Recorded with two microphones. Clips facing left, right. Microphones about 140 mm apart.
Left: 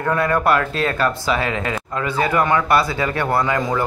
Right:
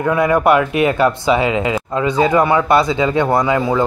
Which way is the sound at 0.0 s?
15° right (ahead or behind).